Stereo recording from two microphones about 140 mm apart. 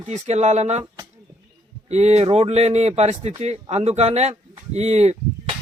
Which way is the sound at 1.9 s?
50° right (ahead or behind).